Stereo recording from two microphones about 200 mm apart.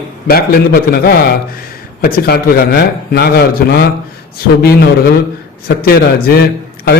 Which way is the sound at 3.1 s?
50° left (ahead or behind).